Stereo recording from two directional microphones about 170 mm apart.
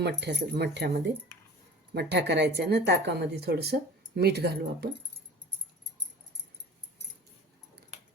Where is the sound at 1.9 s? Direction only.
80° right.